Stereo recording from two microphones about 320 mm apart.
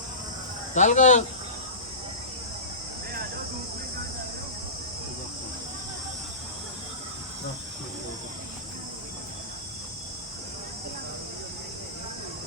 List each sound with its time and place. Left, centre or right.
0.7 s speech: left